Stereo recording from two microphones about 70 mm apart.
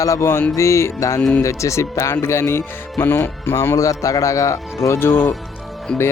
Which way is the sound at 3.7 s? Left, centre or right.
Left.